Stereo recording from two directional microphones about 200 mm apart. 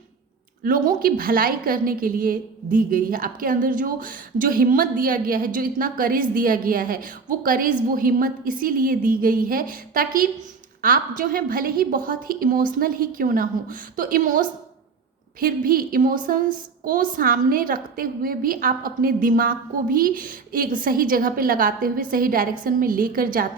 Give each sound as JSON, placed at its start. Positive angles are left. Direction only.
{"t": 0.6, "sound": "a woman's voice", "side_deg": -45}